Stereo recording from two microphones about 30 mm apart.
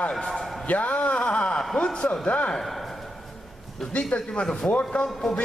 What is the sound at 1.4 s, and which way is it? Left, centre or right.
Speech, left.